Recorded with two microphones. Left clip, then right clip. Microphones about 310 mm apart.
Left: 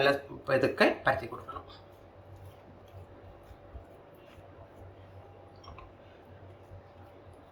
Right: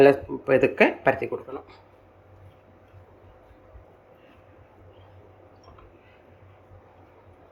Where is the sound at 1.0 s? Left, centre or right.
Centre.